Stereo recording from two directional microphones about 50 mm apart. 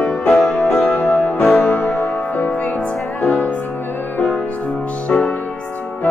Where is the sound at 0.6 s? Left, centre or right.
Left.